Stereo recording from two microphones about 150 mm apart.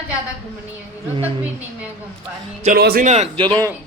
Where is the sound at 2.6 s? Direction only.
80° right.